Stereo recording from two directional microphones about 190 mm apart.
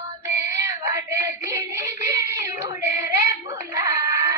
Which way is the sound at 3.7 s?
15° right (ahead or behind).